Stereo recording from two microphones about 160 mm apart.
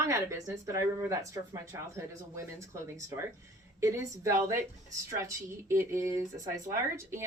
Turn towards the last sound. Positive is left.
turn(degrees=-15)  # may be behind; listen again after turning